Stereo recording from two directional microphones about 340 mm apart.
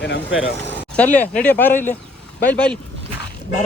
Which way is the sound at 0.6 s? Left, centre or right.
Centre.